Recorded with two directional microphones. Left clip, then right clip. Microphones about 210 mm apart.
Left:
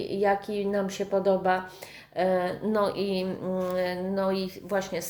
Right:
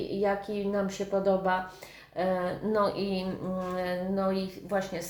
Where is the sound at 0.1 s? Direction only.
25° left (ahead or behind).